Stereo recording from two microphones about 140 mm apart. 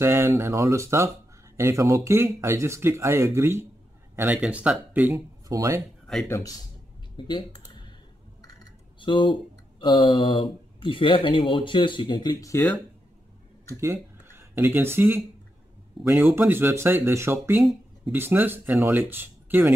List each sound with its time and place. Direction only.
0.0 s speech: 20° right (ahead or behind)
5.1 s speech: 25° right (ahead or behind)
6.2 s a man's voice: 15° left (ahead or behind)
7.2 s computer keyboard: 35° left (ahead or behind)
9.0 s speech: 35° left (ahead or behind)
13.7 s speech: 20° right (ahead or behind)